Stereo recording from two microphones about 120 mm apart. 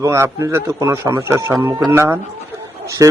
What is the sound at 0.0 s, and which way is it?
A man's voice, 25° right (ahead or behind).